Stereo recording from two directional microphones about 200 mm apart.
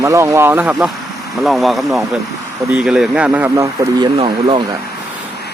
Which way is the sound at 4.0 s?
25° right (ahead or behind).